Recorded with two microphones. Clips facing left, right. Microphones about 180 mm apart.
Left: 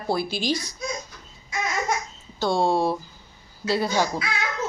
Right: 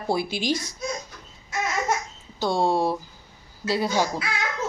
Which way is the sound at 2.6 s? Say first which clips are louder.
Even; 15° right (ahead or behind).